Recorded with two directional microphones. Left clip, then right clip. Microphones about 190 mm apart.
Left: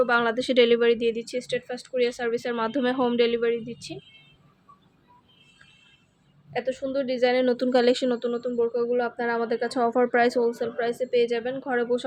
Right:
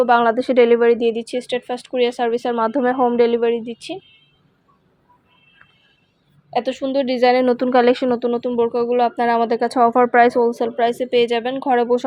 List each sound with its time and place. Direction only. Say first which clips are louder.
0.0 s speech: right 8 dB; 15° right (ahead or behind)
0.3 s speech: right 6 dB; centre (ahead or behind)
0.9 s speech: right 6 dB; 15° right (ahead or behind)
2.6 s speech: right 8 dB; 5° right (ahead or behind)
2.8 s speech: right 7 dB; 10° left (ahead or behind)
3.2 s speech: right 5 dB; 5° right (ahead or behind)
3.4 s speech: right 7 dB; 25° right (ahead or behind)
6.5 s speech: right 7 dB; 35° right (ahead or behind)
7.4 s speech: right 6 dB; centre (ahead or behind)
8.2 s speech: right 7 dB; 20° right (ahead or behind)
9.6 s speech: right 9 dB; 5° right (ahead or behind)
10.5 s speech: right 9 dB; 25° right (ahead or behind)